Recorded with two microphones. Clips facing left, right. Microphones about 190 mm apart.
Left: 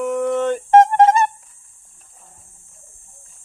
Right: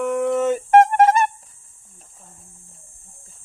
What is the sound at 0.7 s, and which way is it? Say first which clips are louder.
Music: left 2 dB; 25° left (ahead or behind).